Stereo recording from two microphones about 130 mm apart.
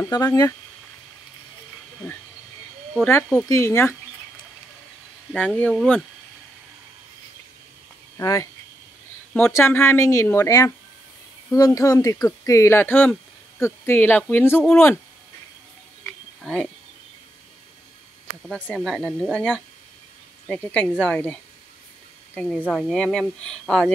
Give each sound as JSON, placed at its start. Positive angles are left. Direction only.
{"t": 0.0, "sound": "speech", "side_deg": 25}
{"t": 3.4, "sound": "speech", "side_deg": 20}
{"t": 5.3, "sound": "speech", "side_deg": 10}
{"t": 8.2, "sound": "speech", "side_deg": 25}
{"t": 9.5, "sound": "speech", "side_deg": 20}
{"t": 16.4, "sound": "speech", "side_deg": 5}
{"t": 18.4, "sound": "speech", "side_deg": 5}